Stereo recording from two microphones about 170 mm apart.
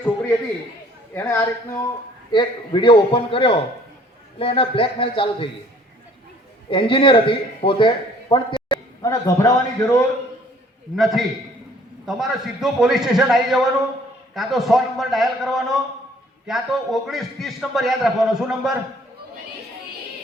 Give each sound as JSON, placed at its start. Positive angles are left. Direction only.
{"t": 1.1, "sound": "speech", "side_deg": 15}
{"t": 2.3, "sound": "a man's voice", "side_deg": 25}
{"t": 6.7, "sound": "a man's voice", "side_deg": 30}
{"t": 10.9, "sound": "a man's voice", "side_deg": 0}